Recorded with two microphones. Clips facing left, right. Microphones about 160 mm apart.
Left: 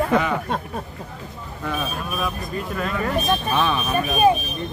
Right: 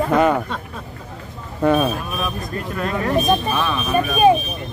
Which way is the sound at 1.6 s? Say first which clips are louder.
Right 11 dB; 55° right (ahead or behind).